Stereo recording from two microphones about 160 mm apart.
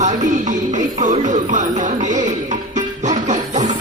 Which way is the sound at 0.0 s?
50° right (ahead or behind).